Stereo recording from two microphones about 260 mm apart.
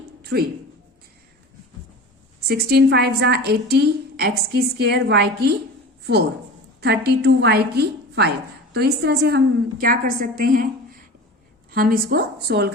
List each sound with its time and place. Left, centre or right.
0.2 s a sound: right
2.5 s a woman's voice: right
6.8 s a woman's voice: right